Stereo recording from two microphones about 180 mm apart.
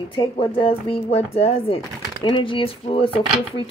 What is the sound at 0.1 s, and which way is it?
Speech, 25° left (ahead or behind).